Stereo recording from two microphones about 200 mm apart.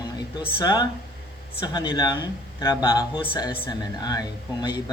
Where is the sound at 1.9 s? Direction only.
20° left (ahead or behind).